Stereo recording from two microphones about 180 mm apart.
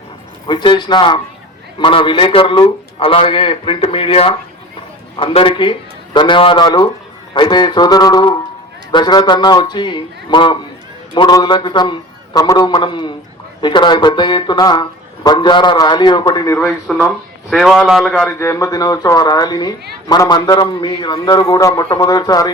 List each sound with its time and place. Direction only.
0.4 s speech: 25° left (ahead or behind)
16.6 s a man's voice: centre (ahead or behind)
18.3 s speech: 15° left (ahead or behind)